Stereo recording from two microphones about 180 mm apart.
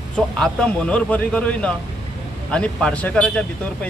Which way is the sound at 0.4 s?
5° left (ahead or behind).